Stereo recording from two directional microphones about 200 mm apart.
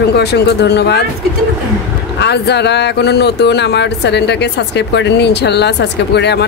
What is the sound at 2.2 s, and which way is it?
Speech, 55° left (ahead or behind).